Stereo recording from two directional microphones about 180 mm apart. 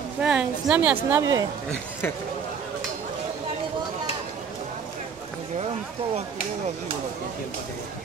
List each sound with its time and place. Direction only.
0.2 s a woman's voice: 5° right (ahead or behind)
1.2 s speech: 20° right (ahead or behind)
1.7 s speech: 10° left (ahead or behind)